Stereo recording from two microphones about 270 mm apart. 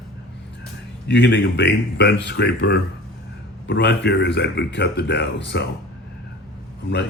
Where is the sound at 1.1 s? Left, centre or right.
Left.